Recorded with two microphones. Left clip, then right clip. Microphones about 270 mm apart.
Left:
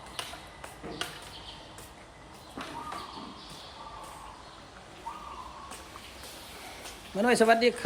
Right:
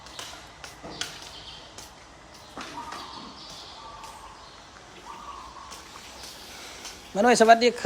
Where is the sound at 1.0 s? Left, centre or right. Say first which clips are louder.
Right 2 dB; left.